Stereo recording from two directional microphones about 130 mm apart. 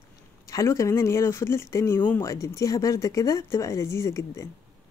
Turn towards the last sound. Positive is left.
turn(degrees=25)  # may be behind; listen again after turning